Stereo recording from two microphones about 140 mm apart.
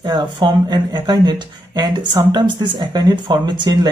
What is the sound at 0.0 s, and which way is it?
Speech, 35° right (ahead or behind).